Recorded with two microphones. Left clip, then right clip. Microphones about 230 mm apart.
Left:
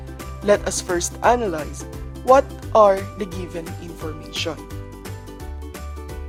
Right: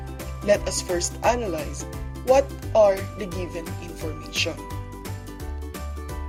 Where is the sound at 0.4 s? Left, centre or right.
Left.